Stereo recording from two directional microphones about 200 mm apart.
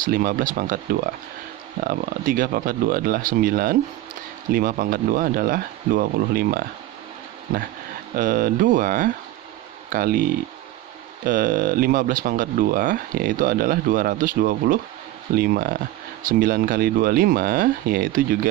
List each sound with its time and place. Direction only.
0.0 s speech: 45° right (ahead or behind)
8.2 s speech: 40° right (ahead or behind)
11.2 s speech: 45° right (ahead or behind)